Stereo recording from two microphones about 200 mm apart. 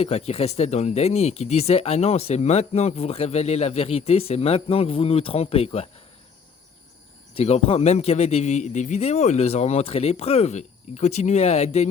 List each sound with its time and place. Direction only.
0.0 s speech: 30° left (ahead or behind)
7.3 s speech: 30° left (ahead or behind)